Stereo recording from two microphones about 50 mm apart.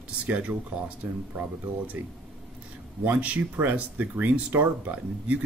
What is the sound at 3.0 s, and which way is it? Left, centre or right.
Speech, right.